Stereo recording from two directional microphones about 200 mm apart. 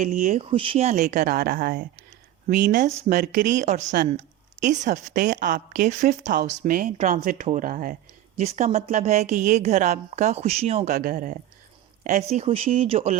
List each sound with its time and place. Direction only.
0.0 s speech: 40° right (ahead or behind)
1.1 s speech: 50° right (ahead or behind); by 10.9 s 30° right (ahead or behind)
10.9 s speech: 45° right (ahead or behind); by 13.1 s 30° right (ahead or behind)